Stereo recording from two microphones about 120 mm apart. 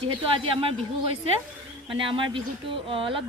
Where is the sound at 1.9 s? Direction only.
45° right (ahead or behind).